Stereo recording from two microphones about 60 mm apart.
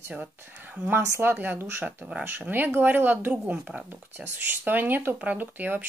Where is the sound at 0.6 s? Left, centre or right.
Right.